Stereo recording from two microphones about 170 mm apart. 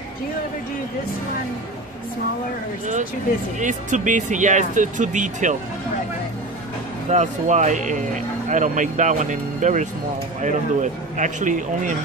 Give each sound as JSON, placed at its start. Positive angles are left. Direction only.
{"t": 3.5, "sound": "speech", "side_deg": -45}
{"t": 7.1, "sound": "speech", "side_deg": -45}